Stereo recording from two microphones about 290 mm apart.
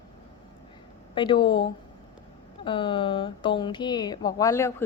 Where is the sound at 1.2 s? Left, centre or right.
Centre.